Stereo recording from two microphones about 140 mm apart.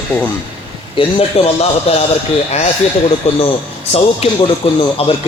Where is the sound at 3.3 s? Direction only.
50° left (ahead or behind).